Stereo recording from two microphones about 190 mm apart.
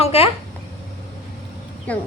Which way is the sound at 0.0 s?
30° left (ahead or behind).